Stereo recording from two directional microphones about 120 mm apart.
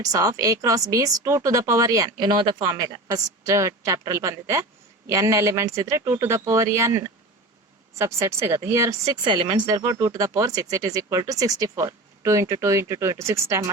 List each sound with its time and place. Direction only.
0.0 s speech: 30° right (ahead or behind)
9.2 s speech: 40° right (ahead or behind); by 13.7 s 25° right (ahead or behind)